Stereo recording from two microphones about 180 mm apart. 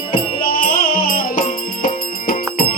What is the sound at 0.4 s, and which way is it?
Music, 55° left (ahead or behind).